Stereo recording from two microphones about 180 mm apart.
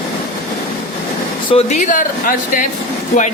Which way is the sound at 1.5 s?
35° left (ahead or behind).